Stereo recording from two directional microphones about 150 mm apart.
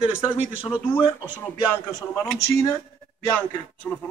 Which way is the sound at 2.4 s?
20° left (ahead or behind).